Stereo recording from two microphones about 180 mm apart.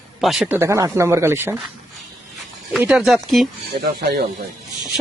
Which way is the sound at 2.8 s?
5° right (ahead or behind).